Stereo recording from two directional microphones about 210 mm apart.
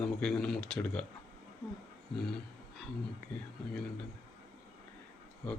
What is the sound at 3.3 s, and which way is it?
Speech, 5° left (ahead or behind).